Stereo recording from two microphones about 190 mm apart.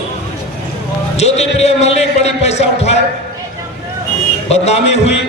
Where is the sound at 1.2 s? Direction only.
35° left (ahead or behind).